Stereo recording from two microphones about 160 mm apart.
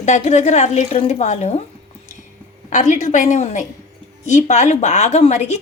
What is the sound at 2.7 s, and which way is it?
A woman's voice, 50° left (ahead or behind).